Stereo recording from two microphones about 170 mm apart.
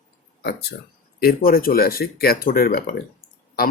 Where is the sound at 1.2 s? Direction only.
60° left (ahead or behind).